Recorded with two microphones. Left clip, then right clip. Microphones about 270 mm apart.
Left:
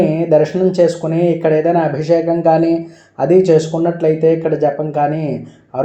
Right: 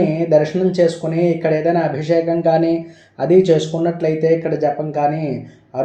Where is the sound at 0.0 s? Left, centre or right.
Centre.